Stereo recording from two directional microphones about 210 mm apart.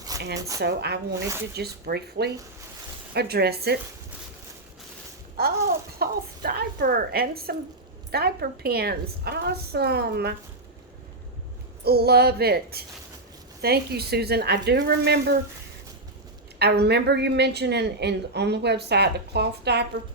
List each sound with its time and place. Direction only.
0.3 s a woman's voice: 15° right (ahead or behind)
0.6 s a woman's voice: 50° right (ahead or behind)
5.4 s a woman's voice: 45° right (ahead or behind)
11.9 s a woman's voice: 50° right (ahead or behind)
16.6 s a woman's voice: 50° right (ahead or behind)